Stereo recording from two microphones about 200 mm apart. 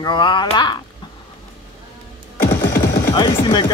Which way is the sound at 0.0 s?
25° left (ahead or behind).